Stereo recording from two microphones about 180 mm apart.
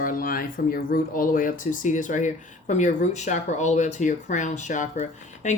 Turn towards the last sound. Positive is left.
turn(degrees=40)  # may be behind; listen again after turning